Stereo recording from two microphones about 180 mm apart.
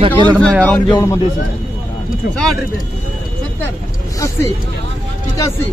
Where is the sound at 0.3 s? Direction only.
15° right (ahead or behind).